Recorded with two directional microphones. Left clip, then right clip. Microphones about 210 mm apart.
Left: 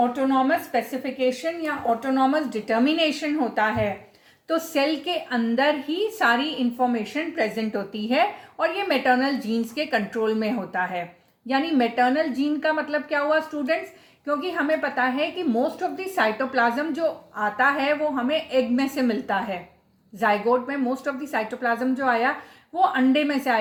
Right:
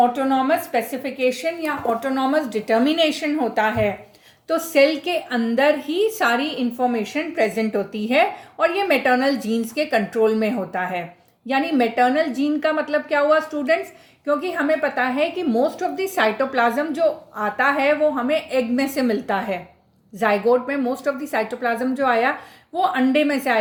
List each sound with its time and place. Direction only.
0.0 s a woman's voice: 40° right (ahead or behind)